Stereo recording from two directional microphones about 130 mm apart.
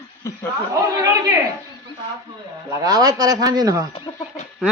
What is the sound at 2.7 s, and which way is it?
Speech, 30° right (ahead or behind).